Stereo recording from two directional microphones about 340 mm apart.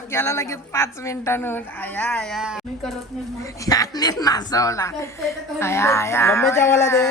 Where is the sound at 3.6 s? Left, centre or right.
Centre.